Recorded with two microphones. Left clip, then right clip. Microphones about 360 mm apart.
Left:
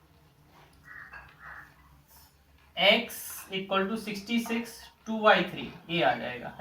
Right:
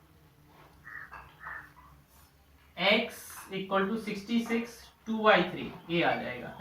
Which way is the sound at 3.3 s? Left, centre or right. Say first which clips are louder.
Left 1 dB; centre.